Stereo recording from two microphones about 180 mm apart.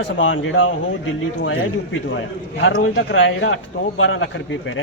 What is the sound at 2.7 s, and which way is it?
Speech, 70° left (ahead or behind).